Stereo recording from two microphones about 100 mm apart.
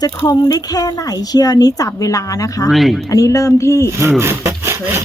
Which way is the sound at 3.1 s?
35° left (ahead or behind).